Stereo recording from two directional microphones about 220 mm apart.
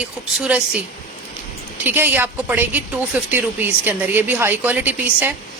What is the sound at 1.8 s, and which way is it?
A woman's voice, 10° right (ahead or behind).